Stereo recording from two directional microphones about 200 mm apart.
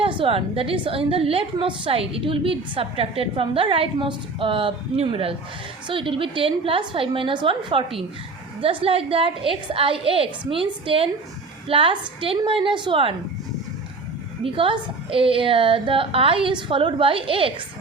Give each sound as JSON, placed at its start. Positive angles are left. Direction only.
{"t": 0.0, "sound": "a woman's voice", "side_deg": -25}
{"t": 14.4, "sound": "a woman's voice", "side_deg": -25}